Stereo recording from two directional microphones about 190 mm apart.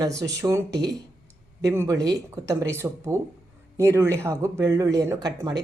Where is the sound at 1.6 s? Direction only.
15° right (ahead or behind).